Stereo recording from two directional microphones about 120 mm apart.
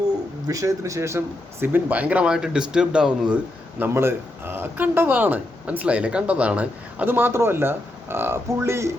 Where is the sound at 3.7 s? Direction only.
20° right (ahead or behind).